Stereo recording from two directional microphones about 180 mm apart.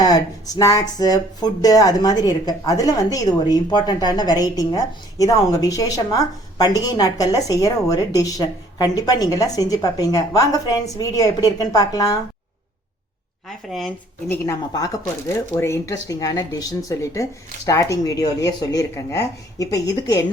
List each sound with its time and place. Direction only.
0.0 s speech: 20° left (ahead or behind)
13.7 s speech: centre (ahead or behind)
14.3 s speech: 15° left (ahead or behind)